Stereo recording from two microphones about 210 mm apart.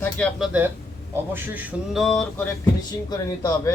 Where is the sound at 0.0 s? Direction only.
Centre (ahead or behind).